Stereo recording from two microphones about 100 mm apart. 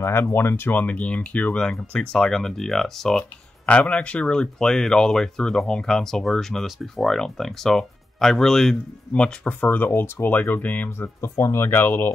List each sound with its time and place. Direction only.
0.0 s speech: 25° left (ahead or behind)
11.1 s speech: 30° left (ahead or behind)